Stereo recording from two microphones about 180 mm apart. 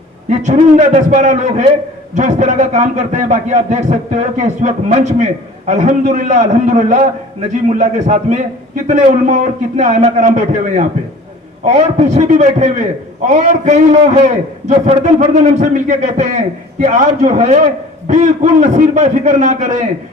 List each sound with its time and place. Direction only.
0.3 s a man's voice: 40° right (ahead or behind)